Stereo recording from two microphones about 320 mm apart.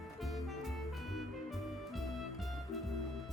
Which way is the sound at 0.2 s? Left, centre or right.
Centre.